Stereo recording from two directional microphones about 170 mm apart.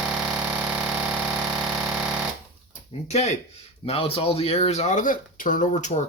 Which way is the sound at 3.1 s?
40° left (ahead or behind).